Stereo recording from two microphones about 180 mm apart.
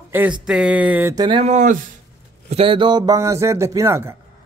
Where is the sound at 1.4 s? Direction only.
45° right (ahead or behind).